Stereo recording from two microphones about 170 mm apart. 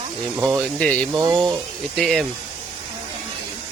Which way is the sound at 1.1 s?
25° right (ahead or behind).